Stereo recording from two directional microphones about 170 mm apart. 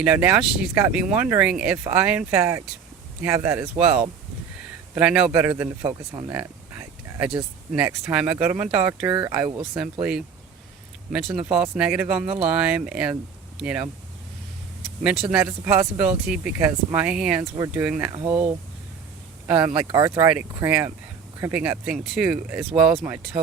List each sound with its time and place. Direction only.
0.0 s speech: 10° right (ahead or behind)
6.3 s a sound: 10° right (ahead or behind)
7.7 s speech: 5° right (ahead or behind)
15.3 s speech: 5° right (ahead or behind)